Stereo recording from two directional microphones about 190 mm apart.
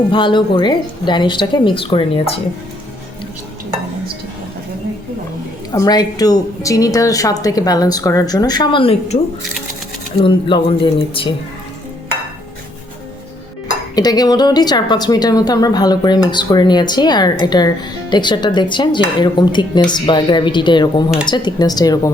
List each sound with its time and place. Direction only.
0.1 s a woman's voice: 25° left (ahead or behind)
5.7 s a woman's voice: 20° left (ahead or behind)
13.9 s a woman's voice: 20° left (ahead or behind)